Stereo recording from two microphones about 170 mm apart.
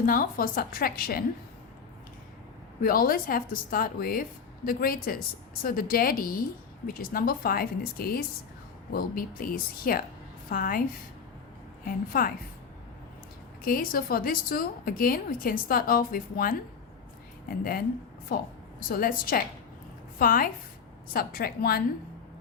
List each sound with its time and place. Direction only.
0.0 s a woman's voice: 55° left (ahead or behind)
2.8 s a woman's voice: 55° left (ahead or behind)
11.9 s a woman's voice: 55° left (ahead or behind)
13.7 s a woman's voice: 60° left (ahead or behind)
17.6 s a woman's voice: 60° left (ahead or behind)